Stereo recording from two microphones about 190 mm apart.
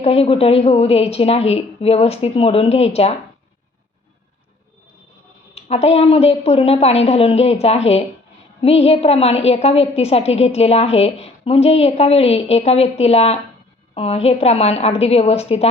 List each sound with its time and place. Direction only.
0.0 s a woman's voice: 30° left (ahead or behind)
5.5 s a woman's voice: 35° left (ahead or behind)